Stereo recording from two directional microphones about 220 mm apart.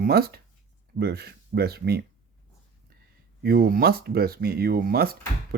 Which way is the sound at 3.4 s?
45° right (ahead or behind).